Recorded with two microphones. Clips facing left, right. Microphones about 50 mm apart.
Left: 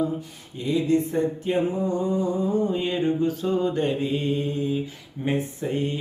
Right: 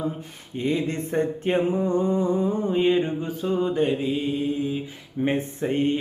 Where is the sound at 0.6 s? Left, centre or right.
Right; by 4.8 s centre.